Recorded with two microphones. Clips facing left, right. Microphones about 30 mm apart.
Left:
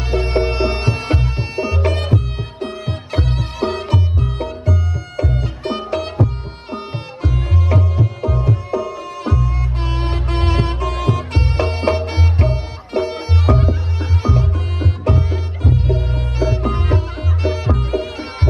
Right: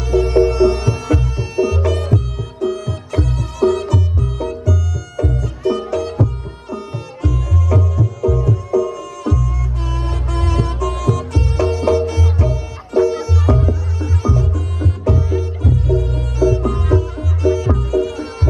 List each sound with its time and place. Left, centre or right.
0.1 s music: left